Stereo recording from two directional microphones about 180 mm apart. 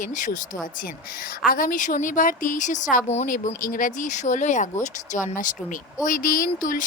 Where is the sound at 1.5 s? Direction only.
50° left (ahead or behind).